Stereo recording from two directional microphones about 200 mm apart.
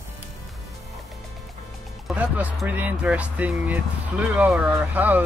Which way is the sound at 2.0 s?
5° right (ahead or behind).